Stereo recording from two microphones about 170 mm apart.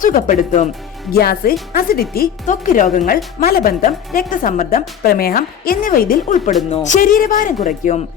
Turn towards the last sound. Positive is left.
turn(degrees=50)  # may be behind; listen again after turning